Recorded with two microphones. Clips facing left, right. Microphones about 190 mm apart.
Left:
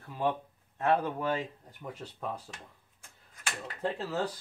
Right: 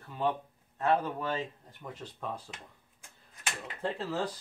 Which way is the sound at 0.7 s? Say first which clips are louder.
Left 1 dB; 15° left (ahead or behind).